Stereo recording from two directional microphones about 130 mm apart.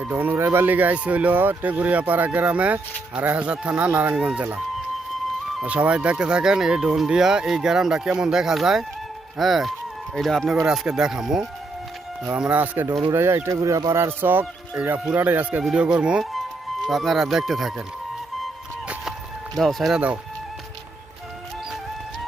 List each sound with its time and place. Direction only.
0.0 s speech: 15° right (ahead or behind)
19.5 s speech: centre (ahead or behind)